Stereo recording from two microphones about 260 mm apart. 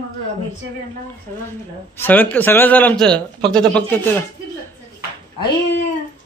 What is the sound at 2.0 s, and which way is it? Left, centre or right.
A man's voice, centre.